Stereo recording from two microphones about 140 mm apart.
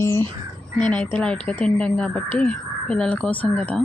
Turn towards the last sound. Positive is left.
turn(degrees=10)  # may be behind; listen again after turning